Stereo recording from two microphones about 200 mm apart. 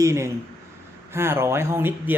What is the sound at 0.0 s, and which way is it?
Speech, 15° right (ahead or behind).